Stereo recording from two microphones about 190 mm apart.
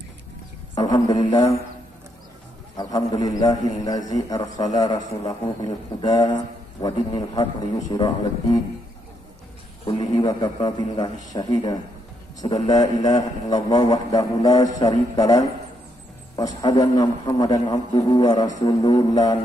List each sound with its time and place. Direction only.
0.7 s a man's voice: 20° left (ahead or behind)
2.8 s a man's voice: 20° left (ahead or behind)
9.8 s a man's voice: 25° left (ahead or behind)